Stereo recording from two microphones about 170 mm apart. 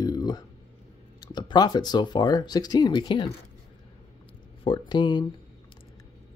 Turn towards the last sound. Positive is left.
turn(degrees=25)  # may be behind; listen again after turning